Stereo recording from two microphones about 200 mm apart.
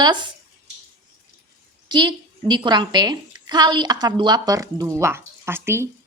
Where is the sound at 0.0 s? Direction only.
20° right (ahead or behind).